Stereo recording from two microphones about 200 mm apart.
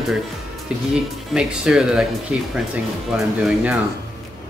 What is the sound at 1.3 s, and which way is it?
Speech, 5° right (ahead or behind).